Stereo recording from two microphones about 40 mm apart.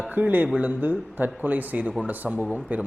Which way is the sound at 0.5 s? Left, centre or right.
Right.